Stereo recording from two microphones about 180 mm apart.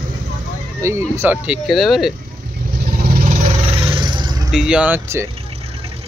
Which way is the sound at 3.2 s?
45° right (ahead or behind).